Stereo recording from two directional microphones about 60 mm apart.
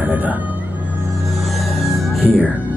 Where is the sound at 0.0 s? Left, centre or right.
Right.